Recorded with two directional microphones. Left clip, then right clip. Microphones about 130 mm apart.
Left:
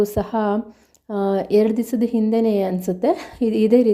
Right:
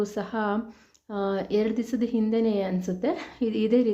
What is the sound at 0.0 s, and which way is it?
A woman's voice, 45° left (ahead or behind).